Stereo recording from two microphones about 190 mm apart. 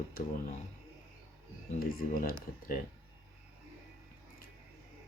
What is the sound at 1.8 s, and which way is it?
Speech, 50° left (ahead or behind).